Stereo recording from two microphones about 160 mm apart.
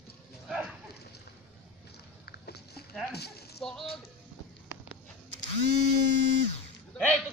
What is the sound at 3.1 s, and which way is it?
Speech, 85° left.